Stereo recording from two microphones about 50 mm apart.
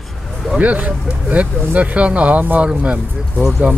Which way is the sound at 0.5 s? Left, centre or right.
Right.